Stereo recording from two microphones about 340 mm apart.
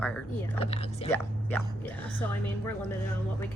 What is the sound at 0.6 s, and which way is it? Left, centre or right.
Speech, centre.